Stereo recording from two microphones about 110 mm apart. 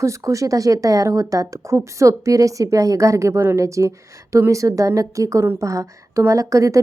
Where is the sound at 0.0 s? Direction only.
30° right (ahead or behind).